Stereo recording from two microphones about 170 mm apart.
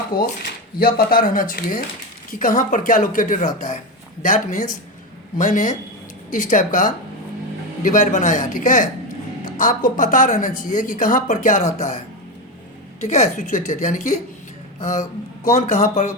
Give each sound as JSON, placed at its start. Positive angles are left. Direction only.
{"t": 0.2, "sound": "speech", "side_deg": 60}
{"t": 13.1, "sound": "speech", "side_deg": 45}
{"t": 15.4, "sound": "speech", "side_deg": 45}